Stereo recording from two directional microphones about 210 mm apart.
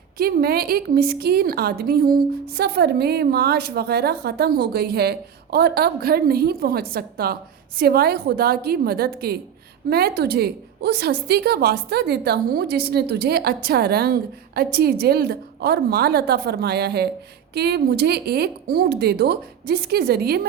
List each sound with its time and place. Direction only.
0.2 s a woman's voice: 45° right (ahead or behind)